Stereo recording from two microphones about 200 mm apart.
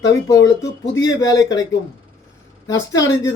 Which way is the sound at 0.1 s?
15° left (ahead or behind).